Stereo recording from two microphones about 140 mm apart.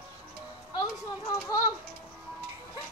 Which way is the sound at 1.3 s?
25° left (ahead or behind).